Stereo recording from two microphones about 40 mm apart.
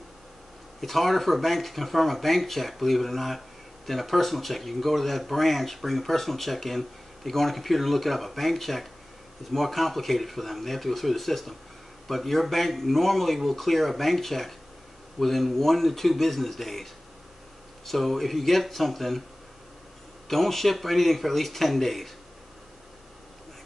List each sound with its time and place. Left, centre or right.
0.7 s speech: centre
20.2 s speech: centre